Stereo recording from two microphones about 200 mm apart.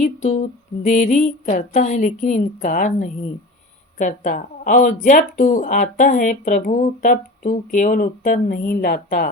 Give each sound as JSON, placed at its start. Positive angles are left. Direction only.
{"t": 0.0, "sound": "speech", "side_deg": 40}